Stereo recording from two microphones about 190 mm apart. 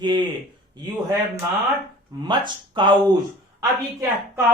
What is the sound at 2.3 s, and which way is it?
Speech, 25° right (ahead or behind).